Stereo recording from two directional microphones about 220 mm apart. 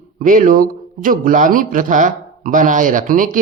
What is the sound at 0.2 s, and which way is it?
A man's voice, 35° right (ahead or behind).